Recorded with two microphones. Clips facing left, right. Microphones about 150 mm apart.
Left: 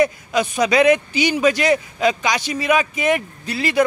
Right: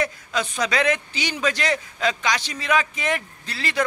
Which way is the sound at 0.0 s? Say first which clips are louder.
Left 7 dB; 10° left (ahead or behind).